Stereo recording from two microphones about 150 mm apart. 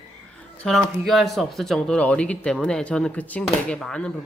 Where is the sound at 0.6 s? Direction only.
Centre (ahead or behind).